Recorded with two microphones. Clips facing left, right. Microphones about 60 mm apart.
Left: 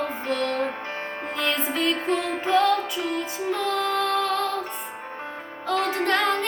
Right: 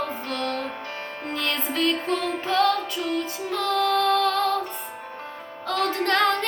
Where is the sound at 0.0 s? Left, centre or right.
Centre.